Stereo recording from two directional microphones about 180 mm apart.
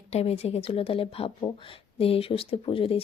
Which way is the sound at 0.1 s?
35° left (ahead or behind).